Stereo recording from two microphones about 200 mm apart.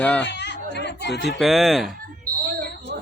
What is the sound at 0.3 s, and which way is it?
Speech, 60° left (ahead or behind).